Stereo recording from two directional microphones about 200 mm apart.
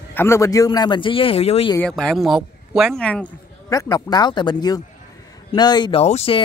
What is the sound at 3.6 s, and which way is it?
Speech, 15° left (ahead or behind).